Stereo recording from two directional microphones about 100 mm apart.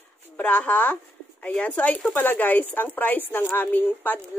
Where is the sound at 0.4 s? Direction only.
15° left (ahead or behind).